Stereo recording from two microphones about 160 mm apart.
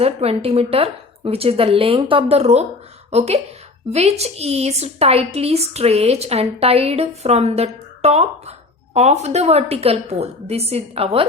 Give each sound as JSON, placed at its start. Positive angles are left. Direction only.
{"t": 0.0, "sound": "a woman's voice", "side_deg": -40}